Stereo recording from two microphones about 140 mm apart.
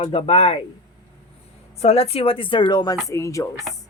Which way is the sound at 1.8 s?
45° left (ahead or behind).